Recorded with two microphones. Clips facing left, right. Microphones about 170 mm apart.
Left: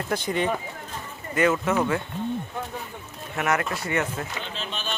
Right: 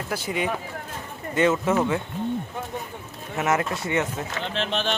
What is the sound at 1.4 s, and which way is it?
Speech, 25° right (ahead or behind).